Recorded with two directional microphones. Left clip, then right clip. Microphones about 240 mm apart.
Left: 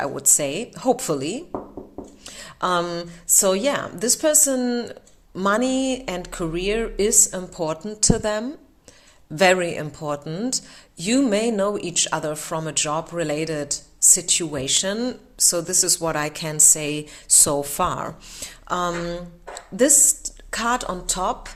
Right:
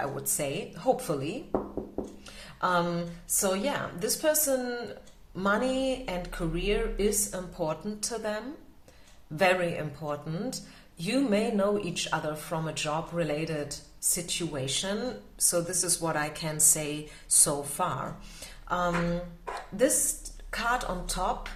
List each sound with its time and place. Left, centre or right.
0.0 s a woman's voice: left